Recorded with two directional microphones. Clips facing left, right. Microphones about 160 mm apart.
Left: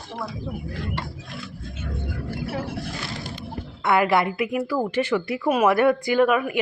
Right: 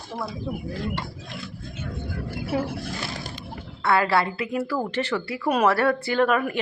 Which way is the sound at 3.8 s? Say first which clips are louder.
Left 2 dB; 20° left (ahead or behind).